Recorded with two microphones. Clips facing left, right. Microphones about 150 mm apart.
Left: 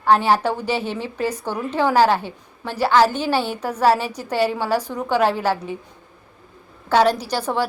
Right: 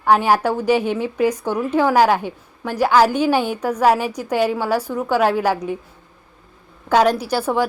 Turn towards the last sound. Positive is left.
turn(degrees=-10)  # may be behind; listen again after turning